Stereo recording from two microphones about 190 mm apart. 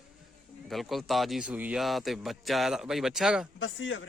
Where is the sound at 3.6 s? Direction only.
80° left.